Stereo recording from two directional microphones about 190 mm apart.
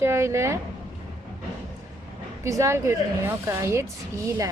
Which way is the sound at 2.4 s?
15° right (ahead or behind).